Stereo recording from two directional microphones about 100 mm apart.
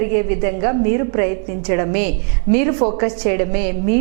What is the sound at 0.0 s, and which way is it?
A woman's voice, 15° right (ahead or behind).